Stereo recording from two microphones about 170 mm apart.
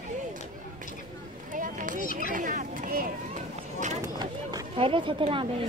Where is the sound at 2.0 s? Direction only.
55° left (ahead or behind).